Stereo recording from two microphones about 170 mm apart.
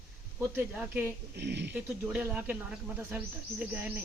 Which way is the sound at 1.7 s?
10° right (ahead or behind).